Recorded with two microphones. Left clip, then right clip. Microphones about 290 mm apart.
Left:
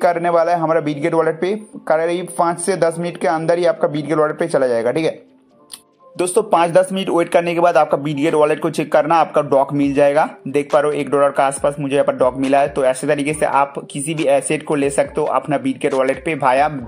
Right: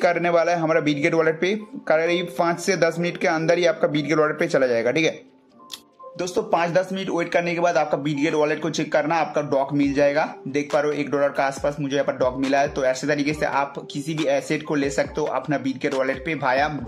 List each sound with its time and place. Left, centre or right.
0.0 s a man's voice: centre
6.1 s speech: left